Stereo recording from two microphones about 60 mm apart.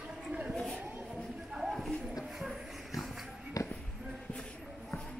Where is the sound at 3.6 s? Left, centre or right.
Left.